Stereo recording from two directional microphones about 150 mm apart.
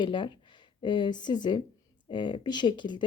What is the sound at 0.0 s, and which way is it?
Speech, 30° left (ahead or behind).